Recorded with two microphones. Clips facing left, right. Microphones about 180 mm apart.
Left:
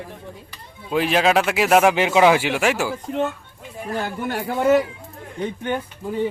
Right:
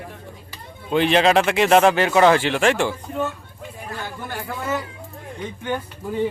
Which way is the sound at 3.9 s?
85° left.